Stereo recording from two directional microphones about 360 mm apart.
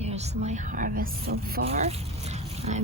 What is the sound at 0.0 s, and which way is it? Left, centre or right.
A woman's voice, centre.